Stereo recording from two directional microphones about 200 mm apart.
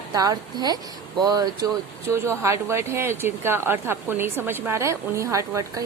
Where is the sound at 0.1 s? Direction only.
20° right (ahead or behind).